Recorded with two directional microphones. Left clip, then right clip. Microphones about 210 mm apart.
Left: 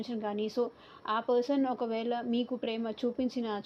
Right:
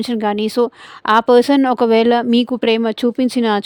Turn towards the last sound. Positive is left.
turn(degrees=-70)  # may be behind; listen again after turning